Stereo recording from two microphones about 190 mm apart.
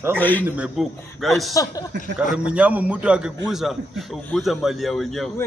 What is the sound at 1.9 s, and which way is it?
Speech, 70° right (ahead or behind).